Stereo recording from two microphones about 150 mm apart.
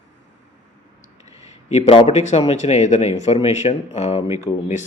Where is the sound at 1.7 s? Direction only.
40° left (ahead or behind).